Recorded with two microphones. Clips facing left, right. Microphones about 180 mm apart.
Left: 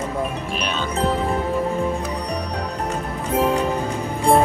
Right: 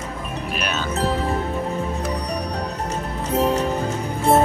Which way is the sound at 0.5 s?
5° right (ahead or behind).